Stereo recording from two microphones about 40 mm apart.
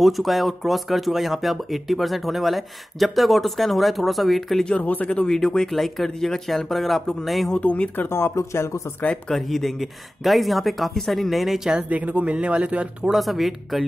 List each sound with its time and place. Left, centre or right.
0.0 s speech: centre
4.7 s speech: left
5.3 s speech: centre
7.5 s speech: left
8.1 s speech: left
9.3 s speech: centre
11.9 s speech: right
13.1 s speech: centre